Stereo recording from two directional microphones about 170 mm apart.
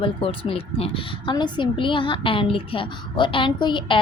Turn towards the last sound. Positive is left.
turn(degrees=30)  # may be behind; listen again after turning